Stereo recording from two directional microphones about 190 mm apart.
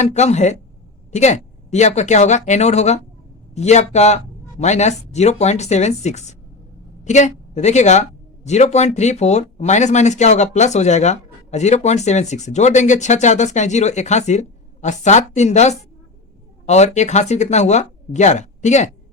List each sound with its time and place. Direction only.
0.0 s a woman's voice: 35° left (ahead or behind)